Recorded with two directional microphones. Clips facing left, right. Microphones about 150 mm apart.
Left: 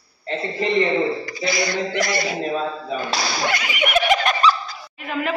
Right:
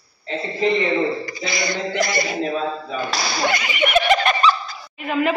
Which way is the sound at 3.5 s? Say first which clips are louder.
Right 4 dB; 5° left (ahead or behind).